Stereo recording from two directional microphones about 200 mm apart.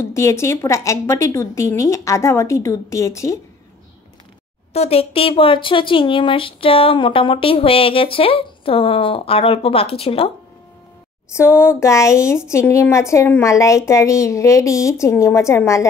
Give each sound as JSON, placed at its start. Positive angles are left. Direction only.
{"t": 0.0, "sound": "a woman's voice", "side_deg": 15}
{"t": 4.7, "sound": "speech", "side_deg": 30}
{"t": 11.3, "sound": "a woman's voice", "side_deg": 10}